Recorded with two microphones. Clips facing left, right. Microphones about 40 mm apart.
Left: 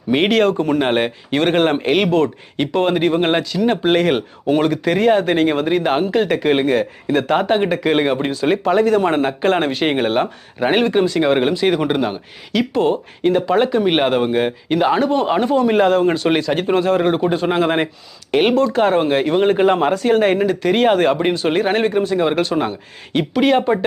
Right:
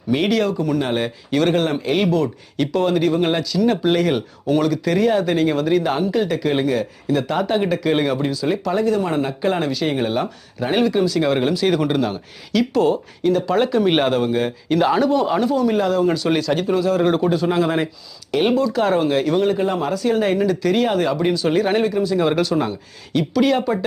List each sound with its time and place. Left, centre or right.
0.1 s speech: left
2.6 s speech: left
12.8 s speech: left
13.4 s a man's voice: centre
15.1 s speech: left
16.7 s speech: left
17.0 s a man's voice: left
17.3 s speech: left
19.5 s speech: left
19.8 s speech: left
20.8 s a man's voice: left